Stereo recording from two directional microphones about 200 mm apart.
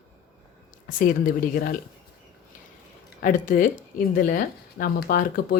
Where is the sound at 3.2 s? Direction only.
40° left (ahead or behind).